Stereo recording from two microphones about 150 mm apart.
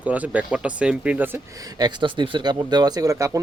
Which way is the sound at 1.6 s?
30° right (ahead or behind).